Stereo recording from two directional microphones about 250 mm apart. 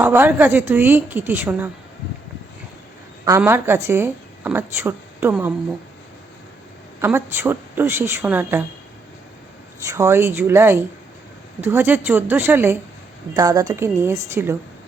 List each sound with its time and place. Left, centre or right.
0.0 s a woman's voice: centre
3.2 s a woman's voice: centre
7.0 s a woman's voice: centre
9.9 s a woman's voice: centre